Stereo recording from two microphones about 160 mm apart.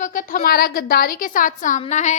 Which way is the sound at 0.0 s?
55° left (ahead or behind).